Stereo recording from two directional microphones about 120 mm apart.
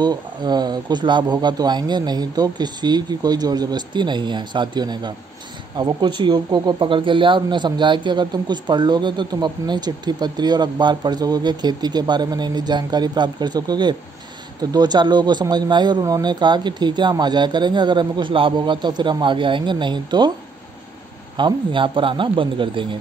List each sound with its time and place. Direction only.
0.0 s speech: 35° right (ahead or behind)
21.4 s speech: 40° right (ahead or behind)